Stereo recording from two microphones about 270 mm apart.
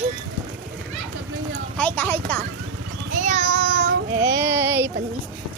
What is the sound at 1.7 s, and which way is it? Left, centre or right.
Speech, centre.